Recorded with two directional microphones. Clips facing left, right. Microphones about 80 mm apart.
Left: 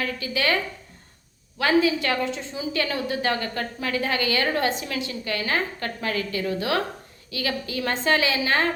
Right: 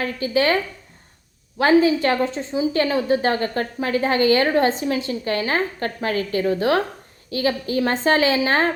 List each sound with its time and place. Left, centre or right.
0.0 s a woman's voice: right
1.5 s a woman's voice: right